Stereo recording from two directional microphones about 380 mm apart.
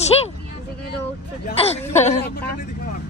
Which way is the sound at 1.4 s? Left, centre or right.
Centre.